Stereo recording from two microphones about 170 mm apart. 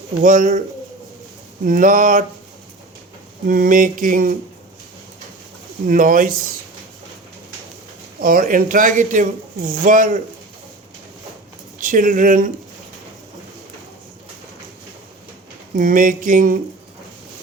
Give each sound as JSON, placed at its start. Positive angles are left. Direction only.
{"t": 0.2, "sound": "speech", "side_deg": -50}
{"t": 1.6, "sound": "speech", "side_deg": -55}
{"t": 3.4, "sound": "speech", "side_deg": -55}
{"t": 5.9, "sound": "speech", "side_deg": -55}
{"t": 8.2, "sound": "speech", "side_deg": -55}
{"t": 11.8, "sound": "speech", "side_deg": -50}
{"t": 15.7, "sound": "speech", "side_deg": -55}